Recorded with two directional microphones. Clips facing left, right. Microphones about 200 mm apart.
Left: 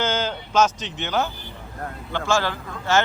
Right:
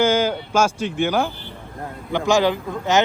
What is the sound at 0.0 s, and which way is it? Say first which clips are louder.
Speech: right 7 dB; 10° right (ahead or behind).